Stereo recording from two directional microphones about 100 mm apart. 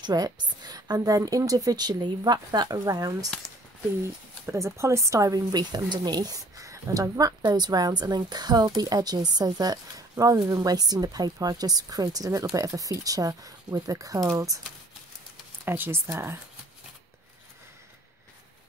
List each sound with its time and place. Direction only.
0.0 s speech: 45° right (ahead or behind)
4.5 s speech: 25° right (ahead or behind)
15.6 s speech: 20° right (ahead or behind)